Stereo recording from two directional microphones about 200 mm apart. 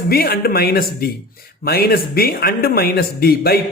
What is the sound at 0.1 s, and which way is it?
Speech, 50° left (ahead or behind).